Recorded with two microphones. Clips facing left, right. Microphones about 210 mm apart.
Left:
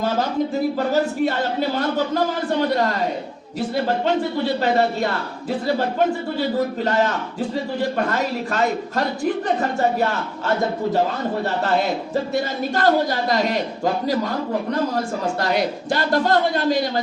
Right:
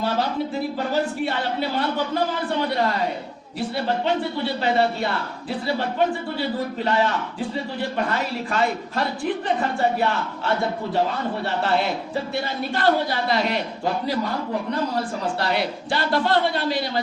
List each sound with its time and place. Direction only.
1.2 s a woman's voice: 45° left (ahead or behind)
6.8 s a woman's voice: 45° left (ahead or behind)
14.9 s a woman's voice: 45° left (ahead or behind)